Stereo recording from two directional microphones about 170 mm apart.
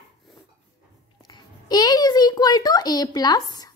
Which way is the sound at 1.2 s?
25° left (ahead or behind).